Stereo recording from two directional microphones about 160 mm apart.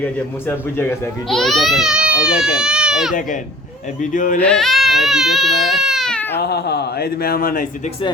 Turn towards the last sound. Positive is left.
turn(degrees=55)  # may be behind; listen again after turning